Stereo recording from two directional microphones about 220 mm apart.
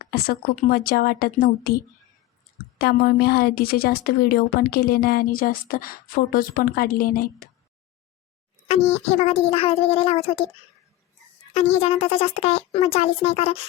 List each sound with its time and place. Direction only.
0.1 s a woman's voice: 45° left (ahead or behind)
8.6 s speech: 30° left (ahead or behind)
11.5 s speech: 30° left (ahead or behind)